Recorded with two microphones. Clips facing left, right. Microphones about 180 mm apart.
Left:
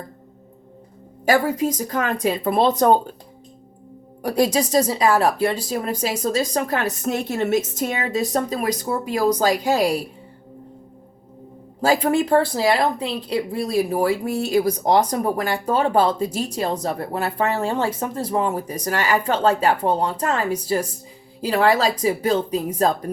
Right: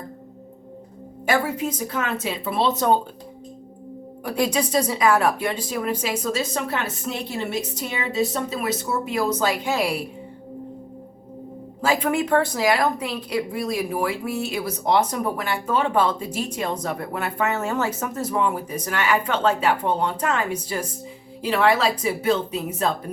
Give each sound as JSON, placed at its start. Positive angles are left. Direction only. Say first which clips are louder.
{"t": 1.3, "sound": "a woman's voice", "louder": "left 4 dB", "side_deg": 35}
{"t": 4.2, "sound": "a woman's voice", "louder": "left 4 dB", "side_deg": 40}
{"t": 11.8, "sound": "speech", "louder": "left 3 dB", "side_deg": 35}